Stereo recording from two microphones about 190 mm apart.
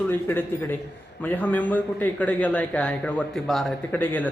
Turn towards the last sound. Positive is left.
turn(degrees=10)  # may be behind; listen again after turning